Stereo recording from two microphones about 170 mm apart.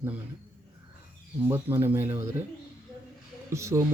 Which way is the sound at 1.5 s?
10° right (ahead or behind).